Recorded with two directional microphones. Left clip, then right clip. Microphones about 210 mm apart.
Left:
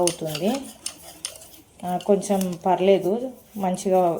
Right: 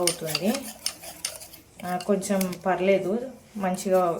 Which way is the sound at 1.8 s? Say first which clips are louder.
Left 5 dB; 10° left (ahead or behind).